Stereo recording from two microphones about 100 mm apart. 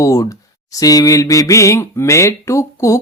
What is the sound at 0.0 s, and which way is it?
Speech, 35° left (ahead or behind).